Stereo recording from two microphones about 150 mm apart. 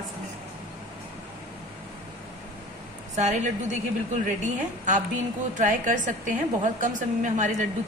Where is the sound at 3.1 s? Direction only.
50° right (ahead or behind).